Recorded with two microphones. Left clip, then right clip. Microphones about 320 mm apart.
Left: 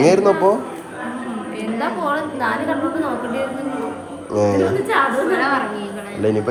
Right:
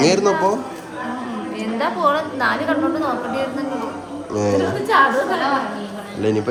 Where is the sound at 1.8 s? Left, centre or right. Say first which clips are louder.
Right 3 dB; right.